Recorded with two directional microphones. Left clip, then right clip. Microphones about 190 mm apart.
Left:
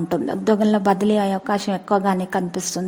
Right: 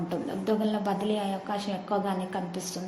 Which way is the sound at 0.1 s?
50° left (ahead or behind).